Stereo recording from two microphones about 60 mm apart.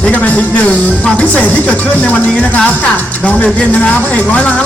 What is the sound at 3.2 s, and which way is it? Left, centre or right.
Speech, left.